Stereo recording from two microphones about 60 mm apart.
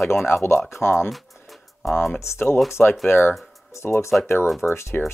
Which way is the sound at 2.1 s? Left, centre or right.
Left.